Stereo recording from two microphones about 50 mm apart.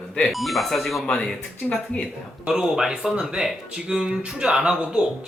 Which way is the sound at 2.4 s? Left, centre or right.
Centre.